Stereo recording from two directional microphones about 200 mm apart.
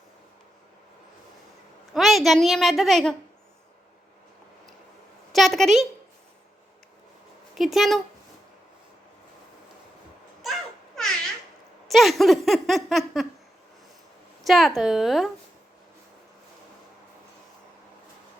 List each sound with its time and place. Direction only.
1.9 s speech: centre (ahead or behind)
5.3 s speech: centre (ahead or behind)
7.5 s speech: centre (ahead or behind)
11.9 s speech: centre (ahead or behind)
14.4 s speech: centre (ahead or behind)